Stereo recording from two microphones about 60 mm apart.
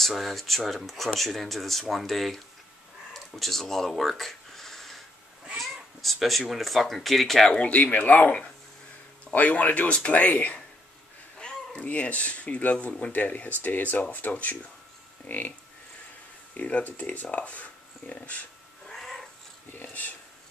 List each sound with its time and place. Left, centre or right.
0.0 s speech: centre
3.1 s a sound: centre
5.6 s cat: centre
6.5 s speech: centre
7.5 s speech: left
16.5 s speech: left
18.9 s cat: centre
19.7 s speech: left